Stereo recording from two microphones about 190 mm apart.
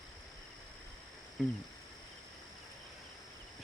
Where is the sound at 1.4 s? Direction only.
Centre (ahead or behind).